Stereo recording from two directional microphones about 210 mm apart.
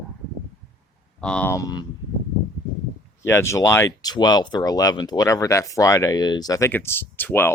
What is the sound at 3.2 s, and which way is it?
Speech, 10° left (ahead or behind).